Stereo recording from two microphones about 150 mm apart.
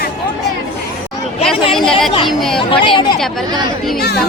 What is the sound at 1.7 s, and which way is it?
Speech, centre (ahead or behind).